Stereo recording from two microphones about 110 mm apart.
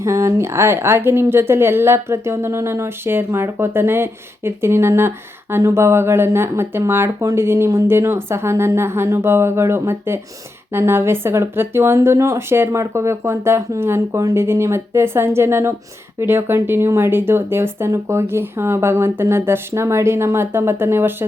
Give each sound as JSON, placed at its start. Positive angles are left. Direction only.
{"t": 0.0, "sound": "a woman's voice", "side_deg": -25}